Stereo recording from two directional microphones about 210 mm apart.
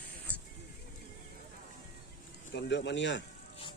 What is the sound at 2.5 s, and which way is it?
Speech, 55° left (ahead or behind).